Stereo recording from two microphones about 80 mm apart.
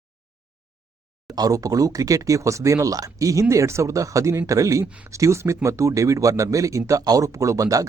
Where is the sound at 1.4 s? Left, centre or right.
Right.